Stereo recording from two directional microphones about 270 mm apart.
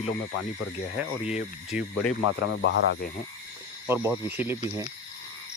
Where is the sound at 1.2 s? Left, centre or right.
Left.